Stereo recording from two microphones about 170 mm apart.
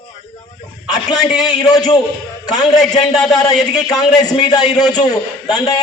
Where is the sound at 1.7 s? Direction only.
25° left (ahead or behind).